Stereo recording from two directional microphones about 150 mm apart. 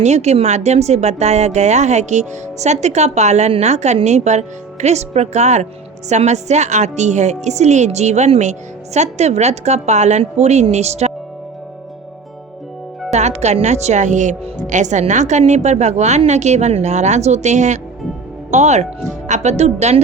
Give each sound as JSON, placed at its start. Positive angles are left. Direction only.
{"t": 0.0, "sound": "speech", "side_deg": -50}
{"t": 13.1, "sound": "speech", "side_deg": -50}